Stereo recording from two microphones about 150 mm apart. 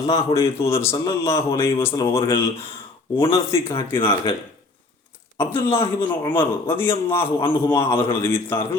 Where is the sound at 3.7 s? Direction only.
35° left (ahead or behind).